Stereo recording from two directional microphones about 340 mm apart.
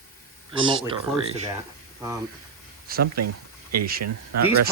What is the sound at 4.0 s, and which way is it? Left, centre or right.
Speech, right.